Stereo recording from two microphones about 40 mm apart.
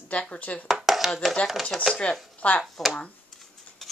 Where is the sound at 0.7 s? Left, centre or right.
Centre.